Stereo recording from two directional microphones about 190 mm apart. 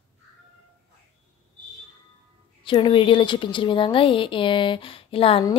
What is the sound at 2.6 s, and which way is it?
A woman's voice, 25° left (ahead or behind).